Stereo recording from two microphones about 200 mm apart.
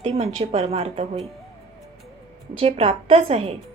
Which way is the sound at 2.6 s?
30° right (ahead or behind).